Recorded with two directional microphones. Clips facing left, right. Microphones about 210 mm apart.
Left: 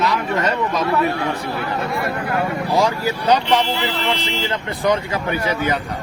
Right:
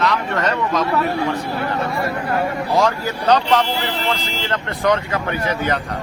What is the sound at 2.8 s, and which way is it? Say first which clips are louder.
Speech: even; 10° left (ahead or behind).